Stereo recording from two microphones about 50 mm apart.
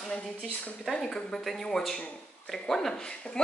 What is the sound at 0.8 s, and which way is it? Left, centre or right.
A woman's voice, centre.